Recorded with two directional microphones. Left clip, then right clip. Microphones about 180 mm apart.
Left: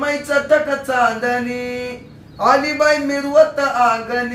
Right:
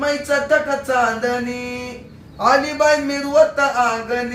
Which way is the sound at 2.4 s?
15° left (ahead or behind).